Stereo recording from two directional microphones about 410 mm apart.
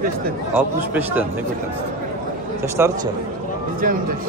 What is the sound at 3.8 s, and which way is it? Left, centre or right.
Speech, centre.